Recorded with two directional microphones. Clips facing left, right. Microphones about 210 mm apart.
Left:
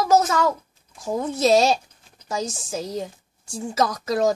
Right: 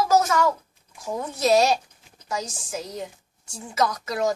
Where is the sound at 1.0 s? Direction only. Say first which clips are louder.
Left 4 dB; 25° left (ahead or behind).